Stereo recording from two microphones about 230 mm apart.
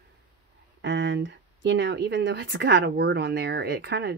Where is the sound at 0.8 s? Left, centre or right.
Right.